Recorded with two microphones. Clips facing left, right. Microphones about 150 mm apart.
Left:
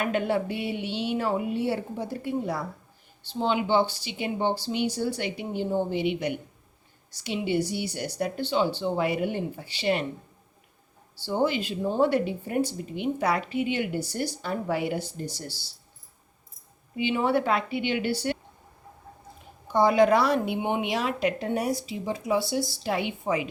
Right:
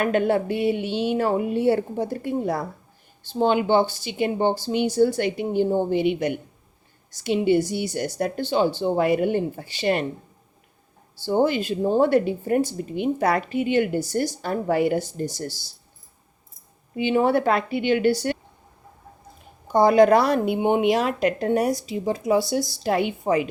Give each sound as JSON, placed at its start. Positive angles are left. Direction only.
{"t": 0.0, "sound": "speech", "side_deg": -50}
{"t": 11.3, "sound": "speech", "side_deg": -45}
{"t": 17.0, "sound": "speech", "side_deg": -45}
{"t": 19.7, "sound": "speech", "side_deg": -45}